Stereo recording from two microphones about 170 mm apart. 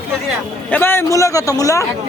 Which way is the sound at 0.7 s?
15° left (ahead or behind).